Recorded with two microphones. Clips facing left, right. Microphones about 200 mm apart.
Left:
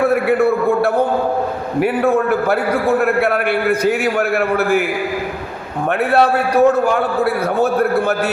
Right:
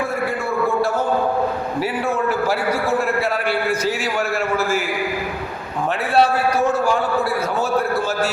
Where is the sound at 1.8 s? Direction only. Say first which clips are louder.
Left 8 dB; 60° left (ahead or behind).